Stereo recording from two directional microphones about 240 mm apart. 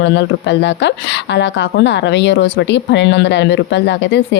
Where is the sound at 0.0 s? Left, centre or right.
Left.